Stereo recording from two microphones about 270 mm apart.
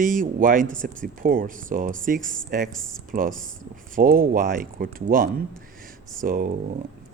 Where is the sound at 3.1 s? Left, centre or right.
Right.